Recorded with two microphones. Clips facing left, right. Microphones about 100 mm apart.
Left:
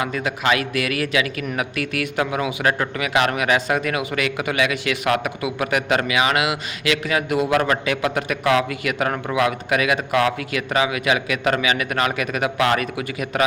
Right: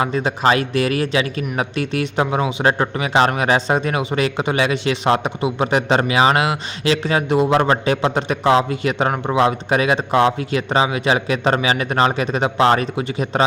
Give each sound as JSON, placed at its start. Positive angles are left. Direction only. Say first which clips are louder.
{"t": 0.0, "sound": "a man's voice", "louder": "right 5 dB", "side_deg": -30}